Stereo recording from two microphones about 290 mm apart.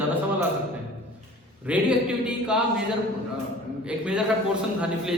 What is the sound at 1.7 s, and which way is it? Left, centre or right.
A man's voice, centre.